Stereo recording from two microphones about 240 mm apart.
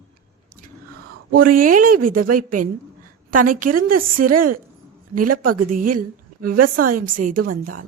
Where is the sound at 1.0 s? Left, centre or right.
Right.